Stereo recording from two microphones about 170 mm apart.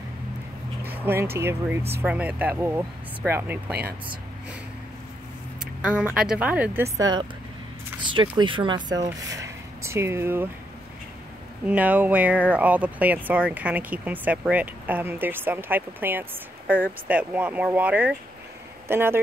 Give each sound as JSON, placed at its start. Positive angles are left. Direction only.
{"t": 0.8, "sound": "speech", "side_deg": -10}
{"t": 5.9, "sound": "speech", "side_deg": -5}
{"t": 11.6, "sound": "speech", "side_deg": -10}